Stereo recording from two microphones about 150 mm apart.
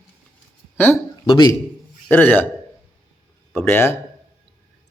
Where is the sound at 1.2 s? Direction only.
30° left (ahead or behind).